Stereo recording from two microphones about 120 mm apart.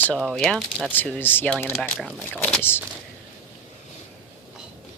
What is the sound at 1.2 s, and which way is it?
Speech, 15° left (ahead or behind).